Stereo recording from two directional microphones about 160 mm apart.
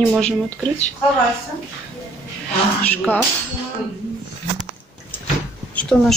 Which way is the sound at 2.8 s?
10° left (ahead or behind).